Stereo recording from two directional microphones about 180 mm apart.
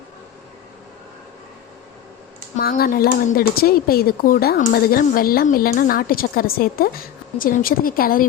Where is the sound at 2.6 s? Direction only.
55° left (ahead or behind).